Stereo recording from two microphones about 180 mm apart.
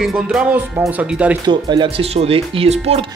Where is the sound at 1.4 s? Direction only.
25° right (ahead or behind).